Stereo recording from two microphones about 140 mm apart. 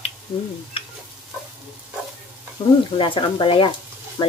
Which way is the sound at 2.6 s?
40° left (ahead or behind).